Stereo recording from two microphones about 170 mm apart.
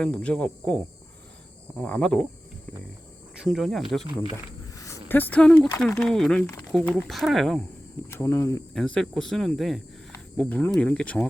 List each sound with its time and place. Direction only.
0.0 s speech: 5° left (ahead or behind)
1.8 s speech: 5° left (ahead or behind)
3.4 s speech: centre (ahead or behind)
4.7 s a sound: 20° left (ahead or behind)
6.0 s speech: 5° left (ahead or behind)
8.1 s speech: 15° left (ahead or behind)
8.7 s speech: 5° left (ahead or behind)